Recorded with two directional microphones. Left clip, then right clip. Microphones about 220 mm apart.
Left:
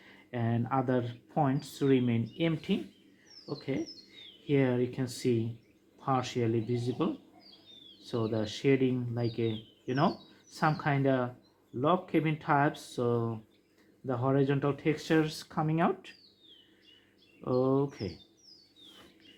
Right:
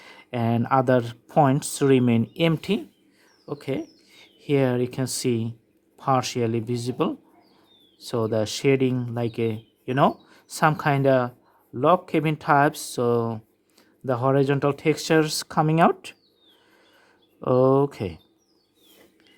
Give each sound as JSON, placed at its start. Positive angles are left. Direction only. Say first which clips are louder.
{"t": 0.0, "sound": "speech", "louder": "right 9 dB", "side_deg": -50}
{"t": 17.4, "sound": "speech", "louder": "right 10 dB", "side_deg": -50}